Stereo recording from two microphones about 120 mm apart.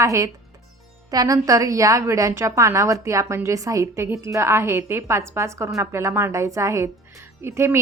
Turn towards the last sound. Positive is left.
turn(degrees=-20)  # may be behind; listen again after turning